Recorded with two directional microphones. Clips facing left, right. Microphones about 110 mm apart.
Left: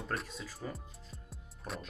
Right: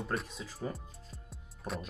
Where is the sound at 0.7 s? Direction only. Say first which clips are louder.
Right 2 dB; centre (ahead or behind).